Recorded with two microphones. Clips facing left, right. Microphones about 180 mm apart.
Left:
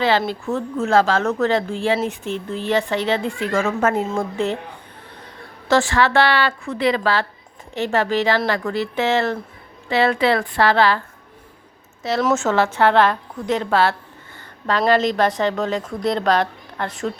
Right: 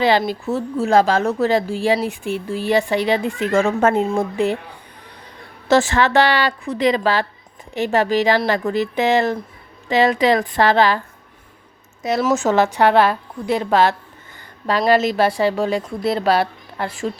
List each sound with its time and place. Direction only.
0.0 s a woman's voice: 15° right (ahead or behind)
4.0 s a woman's voice: 15° right (ahead or behind)
5.6 s a woman's voice: 20° right (ahead or behind)
12.0 s a woman's voice: 15° right (ahead or behind)